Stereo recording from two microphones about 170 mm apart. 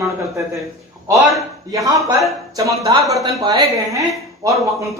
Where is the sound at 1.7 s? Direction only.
20° right (ahead or behind).